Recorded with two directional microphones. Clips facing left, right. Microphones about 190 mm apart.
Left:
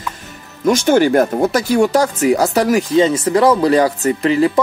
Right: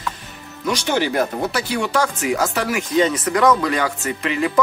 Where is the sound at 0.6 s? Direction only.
45° left (ahead or behind).